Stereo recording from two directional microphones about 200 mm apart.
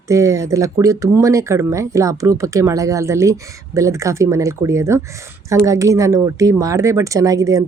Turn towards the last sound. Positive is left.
turn(degrees=-15)  # may be behind; listen again after turning